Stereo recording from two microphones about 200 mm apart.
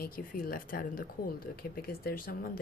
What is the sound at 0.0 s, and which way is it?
A woman's voice, 45° left (ahead or behind).